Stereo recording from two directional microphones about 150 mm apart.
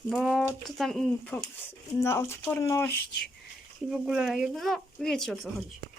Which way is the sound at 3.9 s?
5° right (ahead or behind).